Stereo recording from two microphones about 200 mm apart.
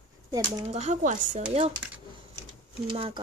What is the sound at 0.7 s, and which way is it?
Speech, 35° right (ahead or behind).